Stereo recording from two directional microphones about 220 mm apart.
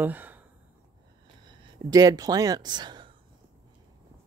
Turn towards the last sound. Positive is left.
turn(degrees=-20)  # may be behind; listen again after turning